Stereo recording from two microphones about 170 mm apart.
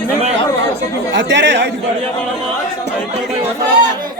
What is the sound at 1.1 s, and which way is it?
Speech, 90° right.